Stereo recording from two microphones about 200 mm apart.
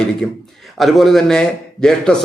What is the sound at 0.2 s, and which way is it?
A man's voice, 5° left (ahead or behind).